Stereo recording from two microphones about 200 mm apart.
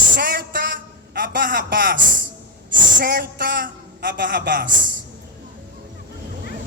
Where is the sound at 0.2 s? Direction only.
50° right (ahead or behind).